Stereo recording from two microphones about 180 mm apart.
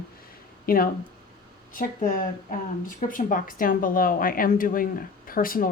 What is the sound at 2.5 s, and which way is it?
Speech, 50° left (ahead or behind).